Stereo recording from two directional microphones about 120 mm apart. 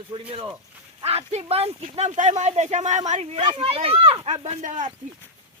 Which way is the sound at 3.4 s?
45° right (ahead or behind).